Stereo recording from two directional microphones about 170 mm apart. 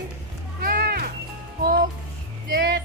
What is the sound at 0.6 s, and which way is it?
Music, 65° right (ahead or behind).